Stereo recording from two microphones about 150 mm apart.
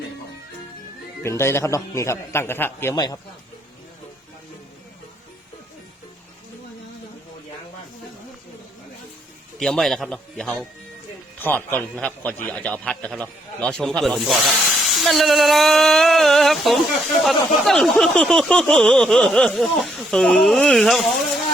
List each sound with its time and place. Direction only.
1.2 s a man's voice: 20° left (ahead or behind)
9.6 s a man's voice: centre (ahead or behind)